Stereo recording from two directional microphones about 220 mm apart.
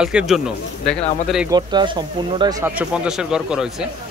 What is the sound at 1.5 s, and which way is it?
Speech, 20° right (ahead or behind).